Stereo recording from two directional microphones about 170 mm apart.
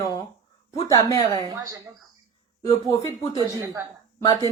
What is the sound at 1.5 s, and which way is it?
Speech, 20° right (ahead or behind).